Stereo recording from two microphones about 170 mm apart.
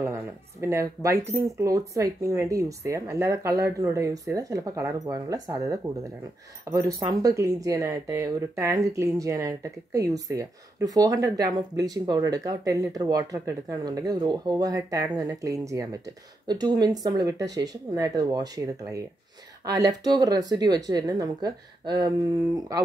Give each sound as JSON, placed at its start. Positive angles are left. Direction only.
{"t": 0.0, "sound": "speech", "side_deg": -15}